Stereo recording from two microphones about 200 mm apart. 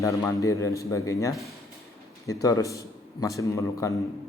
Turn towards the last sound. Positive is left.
turn(degrees=15)  # may be behind; listen again after turning